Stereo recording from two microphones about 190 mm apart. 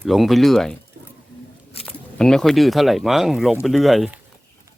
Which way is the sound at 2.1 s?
5° left (ahead or behind).